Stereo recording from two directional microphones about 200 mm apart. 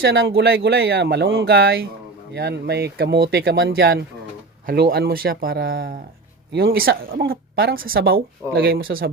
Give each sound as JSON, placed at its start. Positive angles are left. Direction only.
{"t": 0.0, "sound": "speech", "side_deg": -50}